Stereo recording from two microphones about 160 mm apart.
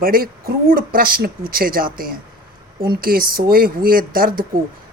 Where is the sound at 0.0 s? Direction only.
65° right (ahead or behind).